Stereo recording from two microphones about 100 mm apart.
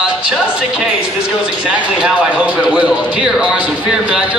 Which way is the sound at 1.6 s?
15° right (ahead or behind).